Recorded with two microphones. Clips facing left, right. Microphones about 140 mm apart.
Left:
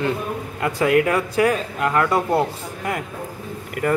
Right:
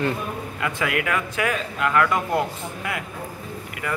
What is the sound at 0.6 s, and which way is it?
Speech, 35° left (ahead or behind).